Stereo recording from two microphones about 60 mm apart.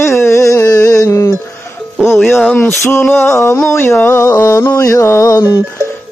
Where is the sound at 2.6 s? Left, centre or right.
Left.